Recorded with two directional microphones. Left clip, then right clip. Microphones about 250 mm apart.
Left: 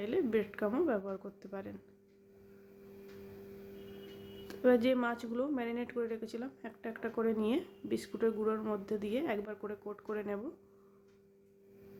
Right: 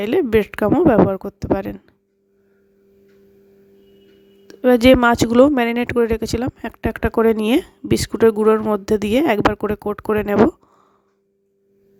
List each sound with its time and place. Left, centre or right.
0.0 s speech: right
4.4 s speech: right